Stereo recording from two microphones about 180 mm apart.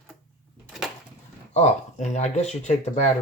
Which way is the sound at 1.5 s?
40° left (ahead or behind).